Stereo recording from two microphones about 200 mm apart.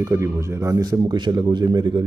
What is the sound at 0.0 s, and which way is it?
Speech, 15° right (ahead or behind).